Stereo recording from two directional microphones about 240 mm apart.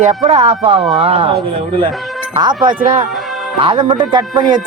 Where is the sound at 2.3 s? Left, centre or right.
Centre.